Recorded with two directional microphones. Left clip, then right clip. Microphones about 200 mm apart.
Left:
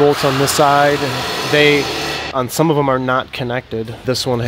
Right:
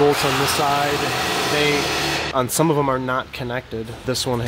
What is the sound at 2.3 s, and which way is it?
Speech, 15° left (ahead or behind).